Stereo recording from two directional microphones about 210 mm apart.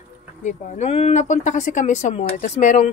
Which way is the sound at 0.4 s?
35° left (ahead or behind).